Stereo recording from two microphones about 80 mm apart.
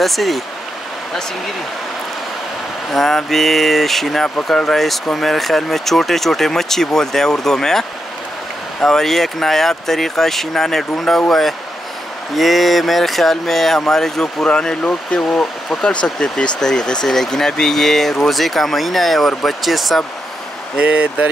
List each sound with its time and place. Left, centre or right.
0.0 s speech: centre
2.9 s speech: centre
8.8 s speech: centre
20.7 s speech: centre